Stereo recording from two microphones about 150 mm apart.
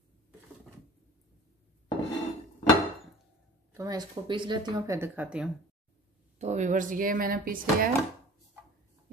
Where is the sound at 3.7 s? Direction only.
25° right (ahead or behind); by 5.5 s 5° right (ahead or behind).